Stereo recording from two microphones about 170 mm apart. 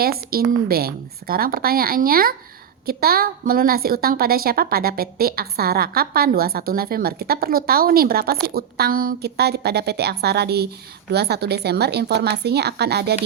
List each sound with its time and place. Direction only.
0.0 s a woman's voice: 60° right (ahead or behind)